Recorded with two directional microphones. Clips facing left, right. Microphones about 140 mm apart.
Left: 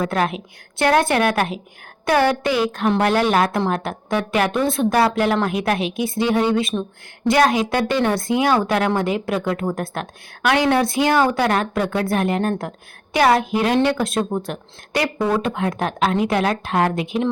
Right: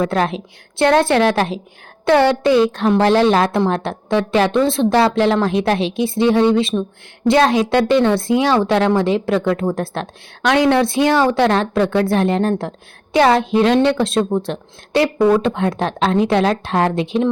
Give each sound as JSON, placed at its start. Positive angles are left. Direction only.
{"t": 0.0, "sound": "a woman's voice", "side_deg": -30}